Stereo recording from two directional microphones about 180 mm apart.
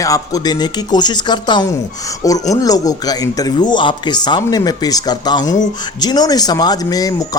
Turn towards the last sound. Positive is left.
turn(degrees=20)  # may be behind; listen again after turning